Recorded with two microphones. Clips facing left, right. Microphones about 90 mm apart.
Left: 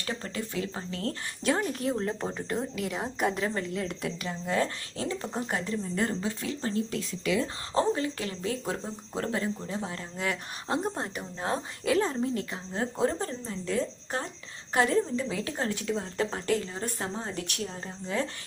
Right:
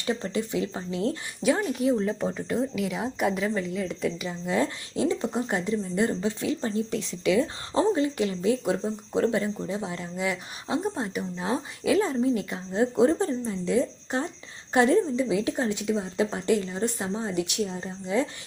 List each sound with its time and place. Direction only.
0.0 s a woman's voice: 20° right (ahead or behind)
9.6 s a woman's voice: 10° right (ahead or behind)
12.4 s speech: 15° right (ahead or behind)
14.7 s a woman's voice: 25° right (ahead or behind)